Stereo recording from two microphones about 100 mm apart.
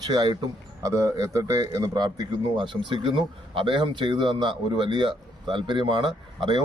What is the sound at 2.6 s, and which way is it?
A man's voice, 55° right (ahead or behind).